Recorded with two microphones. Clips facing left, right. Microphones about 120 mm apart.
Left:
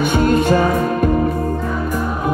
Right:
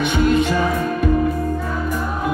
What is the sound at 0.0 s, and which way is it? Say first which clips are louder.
Music: left 2 dB; 45° left (ahead or behind).